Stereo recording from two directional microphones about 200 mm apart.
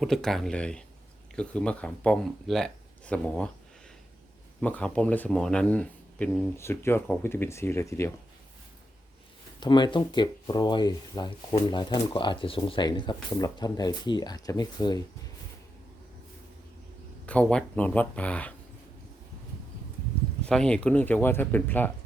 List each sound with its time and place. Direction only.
0.0 s speech: centre (ahead or behind)
4.6 s speech: 5° left (ahead or behind)
9.6 s speech: 20° left (ahead or behind)
17.2 s speech: 5° left (ahead or behind)
20.5 s speech: 5° left (ahead or behind)